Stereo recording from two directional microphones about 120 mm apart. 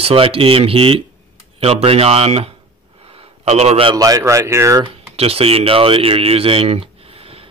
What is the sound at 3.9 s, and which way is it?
Speech, 30° right (ahead or behind).